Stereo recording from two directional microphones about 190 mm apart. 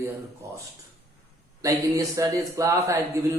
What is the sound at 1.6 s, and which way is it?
A man's voice, 15° right (ahead or behind).